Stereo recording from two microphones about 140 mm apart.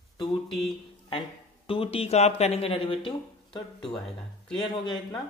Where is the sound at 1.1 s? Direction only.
40° left (ahead or behind).